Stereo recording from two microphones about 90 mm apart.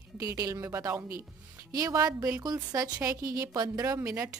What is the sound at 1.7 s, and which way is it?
A woman's voice, 45° right (ahead or behind).